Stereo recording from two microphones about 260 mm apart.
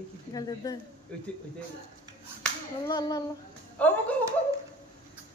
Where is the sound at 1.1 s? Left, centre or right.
Centre.